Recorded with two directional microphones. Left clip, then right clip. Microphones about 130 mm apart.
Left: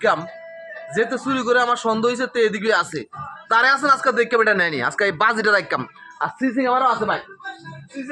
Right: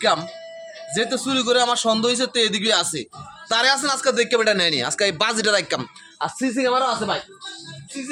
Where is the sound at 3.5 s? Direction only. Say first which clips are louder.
Left 4 dB; 25° right (ahead or behind).